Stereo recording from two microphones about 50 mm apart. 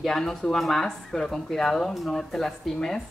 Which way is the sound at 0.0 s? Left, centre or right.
Centre.